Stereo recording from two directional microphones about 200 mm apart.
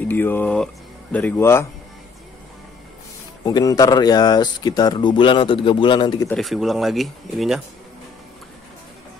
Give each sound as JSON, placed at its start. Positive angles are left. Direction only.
{"t": 0.0, "sound": "speech", "side_deg": 10}
{"t": 3.4, "sound": "speech", "side_deg": 20}
{"t": 6.2, "sound": "speech", "side_deg": 0}